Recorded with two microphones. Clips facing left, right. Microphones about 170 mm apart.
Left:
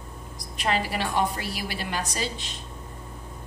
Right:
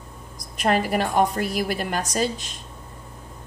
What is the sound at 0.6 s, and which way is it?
A woman's voice, 45° right (ahead or behind).